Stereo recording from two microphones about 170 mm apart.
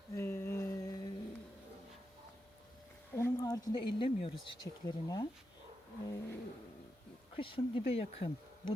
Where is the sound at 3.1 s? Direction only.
15° left (ahead or behind).